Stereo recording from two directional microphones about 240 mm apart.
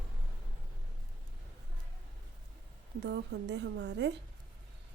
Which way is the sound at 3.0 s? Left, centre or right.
Right.